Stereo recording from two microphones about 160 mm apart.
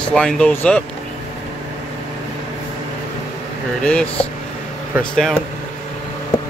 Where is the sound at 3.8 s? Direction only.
10° left (ahead or behind).